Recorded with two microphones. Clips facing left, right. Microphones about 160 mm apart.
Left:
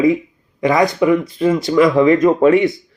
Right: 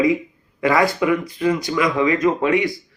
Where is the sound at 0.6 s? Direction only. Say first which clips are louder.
Left 3 dB; 20° left (ahead or behind).